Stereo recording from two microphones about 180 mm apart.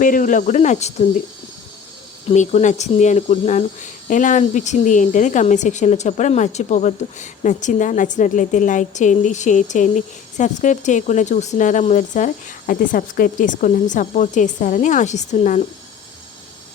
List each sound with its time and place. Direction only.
0.0 s speech: 45° left (ahead or behind)
2.3 s speech: 40° left (ahead or behind)